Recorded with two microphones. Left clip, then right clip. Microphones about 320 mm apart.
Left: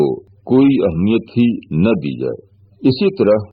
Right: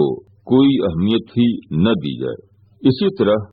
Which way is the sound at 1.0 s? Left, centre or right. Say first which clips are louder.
Left 2 dB; left.